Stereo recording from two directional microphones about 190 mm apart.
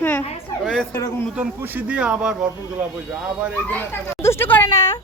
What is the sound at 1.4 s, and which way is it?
Speech, 10° right (ahead or behind).